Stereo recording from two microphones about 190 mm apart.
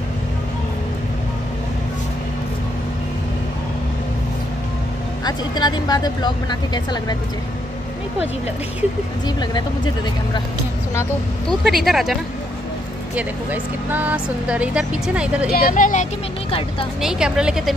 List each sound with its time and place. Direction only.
5.2 s speech: 20° left (ahead or behind)
9.4 s speech: 20° left (ahead or behind)
11.4 s speech: centre (ahead or behind)
15.5 s speech: 45° left (ahead or behind)
17.0 s speech: 5° right (ahead or behind)